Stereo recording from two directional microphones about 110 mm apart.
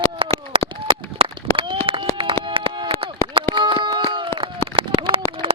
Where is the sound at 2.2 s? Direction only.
50° right (ahead or behind).